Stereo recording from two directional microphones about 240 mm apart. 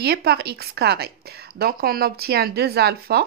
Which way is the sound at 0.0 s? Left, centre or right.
Right.